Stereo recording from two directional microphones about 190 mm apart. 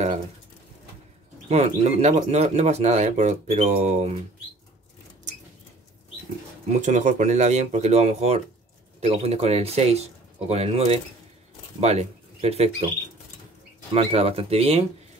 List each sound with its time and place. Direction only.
1.5 s speech: 35° right (ahead or behind)
6.7 s speech: 40° right (ahead or behind)
13.9 s speech: 30° right (ahead or behind)